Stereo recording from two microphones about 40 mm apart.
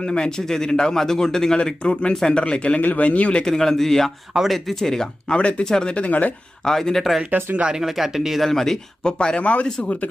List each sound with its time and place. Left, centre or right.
0.0 s a man's voice: centre
1.5 s speech: left
2.8 s speech: left
3.4 s a man's voice: centre
5.3 s speech: left
5.6 s a man's voice: centre
5.9 s speech: left
6.7 s a man's voice: centre
7.3 s speech: right
7.7 s speech: centre
8.4 s a man's voice: centre
9.0 s speech: left
9.4 s speech: left